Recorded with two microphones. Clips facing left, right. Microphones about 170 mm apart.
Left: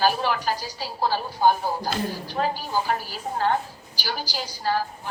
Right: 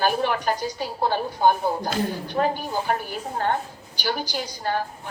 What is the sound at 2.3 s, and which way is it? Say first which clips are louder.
A woman's voice: right 3 dB; 55° right (ahead or behind).